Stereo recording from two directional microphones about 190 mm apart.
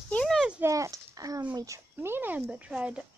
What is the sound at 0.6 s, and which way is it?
A child's voice, 15° right (ahead or behind).